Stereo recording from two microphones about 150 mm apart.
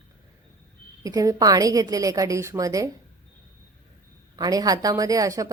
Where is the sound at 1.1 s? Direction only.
25° right (ahead or behind).